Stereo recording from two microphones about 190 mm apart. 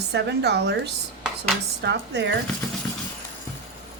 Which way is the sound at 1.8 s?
65° right (ahead or behind).